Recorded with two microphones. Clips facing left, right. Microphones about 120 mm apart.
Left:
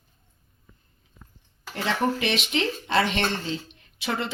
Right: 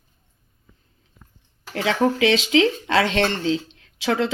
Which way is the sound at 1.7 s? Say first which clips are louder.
Right 5 dB; 90° right.